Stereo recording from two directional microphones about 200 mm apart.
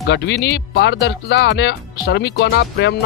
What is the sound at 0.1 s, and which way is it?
Speech, 60° left (ahead or behind).